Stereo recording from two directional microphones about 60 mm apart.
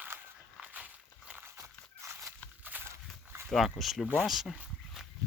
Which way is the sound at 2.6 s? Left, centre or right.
Right.